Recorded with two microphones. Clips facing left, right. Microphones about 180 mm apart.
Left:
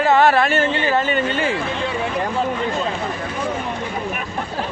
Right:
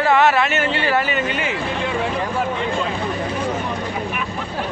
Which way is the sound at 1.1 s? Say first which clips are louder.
Left 2 dB; 30° left (ahead or behind).